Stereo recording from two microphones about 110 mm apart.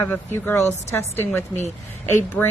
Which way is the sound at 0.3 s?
25° left (ahead or behind).